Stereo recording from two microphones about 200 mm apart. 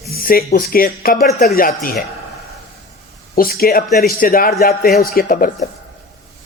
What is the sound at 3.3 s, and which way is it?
Speech, 45° left (ahead or behind).